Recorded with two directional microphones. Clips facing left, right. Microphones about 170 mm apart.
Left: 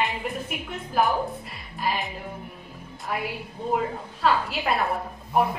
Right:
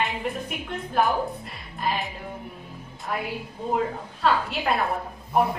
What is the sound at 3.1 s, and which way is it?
A woman's voice, 5° left (ahead or behind).